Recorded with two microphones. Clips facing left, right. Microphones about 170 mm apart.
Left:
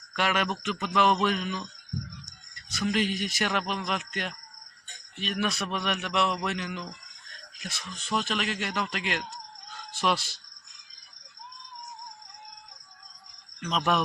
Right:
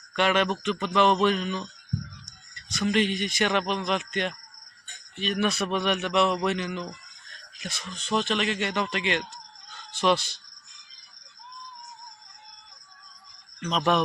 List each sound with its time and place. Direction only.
0.2 s a man's voice: 5° left (ahead or behind)
13.6 s speech: centre (ahead or behind)